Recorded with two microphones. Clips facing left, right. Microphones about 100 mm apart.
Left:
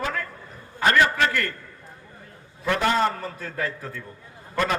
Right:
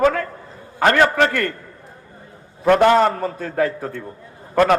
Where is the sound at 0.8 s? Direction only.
55° right (ahead or behind).